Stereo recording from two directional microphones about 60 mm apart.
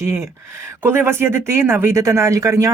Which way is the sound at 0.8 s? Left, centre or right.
Right.